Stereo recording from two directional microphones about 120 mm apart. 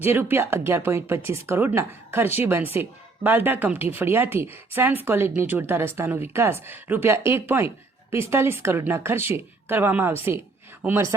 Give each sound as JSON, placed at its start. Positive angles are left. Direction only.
{"t": 0.0, "sound": "speech", "side_deg": -20}